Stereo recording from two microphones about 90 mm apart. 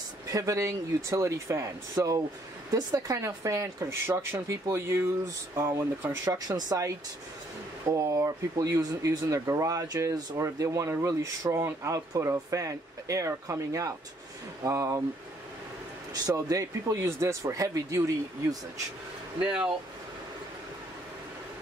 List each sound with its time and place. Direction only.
0.3 s speech: 40° right (ahead or behind)
2.0 s speech: 45° right (ahead or behind)
7.9 s speech: 35° right (ahead or behind)
16.1 s speech: 40° right (ahead or behind)
19.4 s speech: 10° right (ahead or behind)